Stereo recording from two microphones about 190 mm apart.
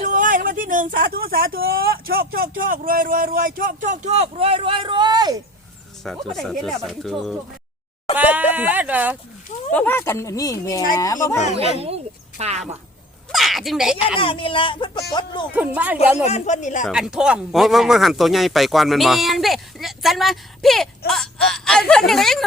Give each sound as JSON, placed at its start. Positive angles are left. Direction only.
{"t": 0.0, "sound": "speech", "side_deg": -45}
{"t": 6.1, "sound": "speech", "side_deg": 0}
{"t": 9.7, "sound": "speech", "side_deg": 10}
{"t": 11.4, "sound": "speech", "side_deg": 35}
{"t": 12.4, "sound": "speech", "side_deg": -35}
{"t": 13.3, "sound": "speech", "side_deg": 0}
{"t": 14.2, "sound": "speech", "side_deg": 25}
{"t": 15.5, "sound": "speech", "side_deg": -10}
{"t": 16.2, "sound": "speech", "side_deg": 35}
{"t": 16.8, "sound": "speech", "side_deg": -5}